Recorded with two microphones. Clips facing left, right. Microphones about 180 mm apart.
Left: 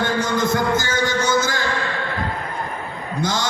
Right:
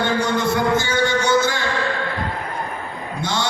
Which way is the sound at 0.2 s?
45° left (ahead or behind).